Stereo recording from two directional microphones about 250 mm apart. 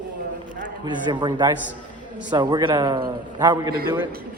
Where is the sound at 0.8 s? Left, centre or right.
Centre.